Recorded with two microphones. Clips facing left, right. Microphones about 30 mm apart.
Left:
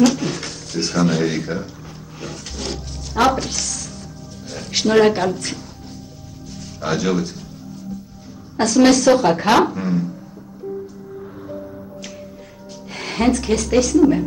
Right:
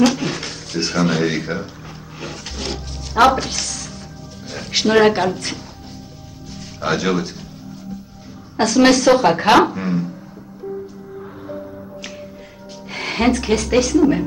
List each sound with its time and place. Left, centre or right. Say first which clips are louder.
0.0 s speech: even; centre
6.8 s speech: right 1 dB; centre
8.5 s speech: even; centre
11.1 s music: right 1 dB; centre
12.9 s speech: right 1 dB; centre